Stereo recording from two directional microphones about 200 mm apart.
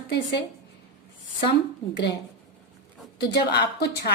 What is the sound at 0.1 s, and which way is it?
Speech, 60° left (ahead or behind).